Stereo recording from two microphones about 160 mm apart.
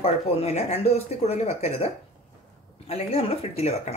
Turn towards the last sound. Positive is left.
turn(degrees=40)  # may be behind; listen again after turning